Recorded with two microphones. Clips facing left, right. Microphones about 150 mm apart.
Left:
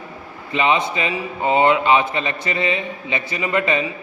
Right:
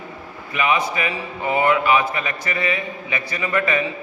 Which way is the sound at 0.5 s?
25° left (ahead or behind).